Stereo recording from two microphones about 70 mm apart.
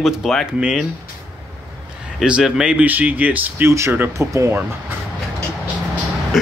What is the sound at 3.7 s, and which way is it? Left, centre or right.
Speech, right.